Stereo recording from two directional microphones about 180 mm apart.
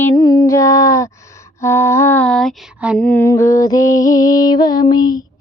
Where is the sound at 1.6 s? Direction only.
15° left (ahead or behind); by 3.0 s 5° right (ahead or behind).